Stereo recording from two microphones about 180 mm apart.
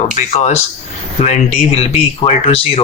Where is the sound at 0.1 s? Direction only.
40° left (ahead or behind).